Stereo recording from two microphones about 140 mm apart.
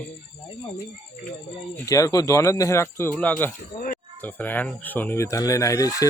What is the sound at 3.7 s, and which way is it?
Speech, 80° left.